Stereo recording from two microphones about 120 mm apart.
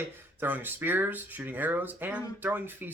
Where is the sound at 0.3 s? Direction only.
15° right (ahead or behind).